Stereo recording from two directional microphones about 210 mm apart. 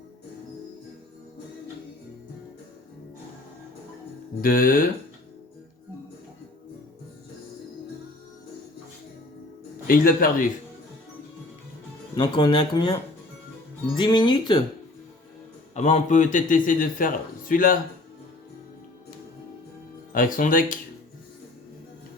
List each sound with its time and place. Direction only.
4.4 s speech: 45° left (ahead or behind)
9.8 s speech: 45° left (ahead or behind)
12.1 s speech: 20° left (ahead or behind)
14.0 s speech: 20° left (ahead or behind)
15.7 s a man's voice: 35° left (ahead or behind)
20.1 s a man's voice: 40° left (ahead or behind)